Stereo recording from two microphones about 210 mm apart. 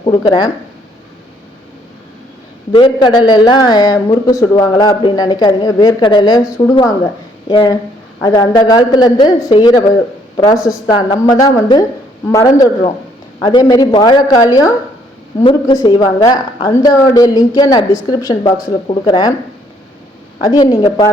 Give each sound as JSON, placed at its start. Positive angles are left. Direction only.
{"t": 0.0, "sound": "speech", "side_deg": 20}
{"t": 2.7, "sound": "a woman's voice", "side_deg": 20}
{"t": 20.4, "sound": "a woman's voice", "side_deg": 20}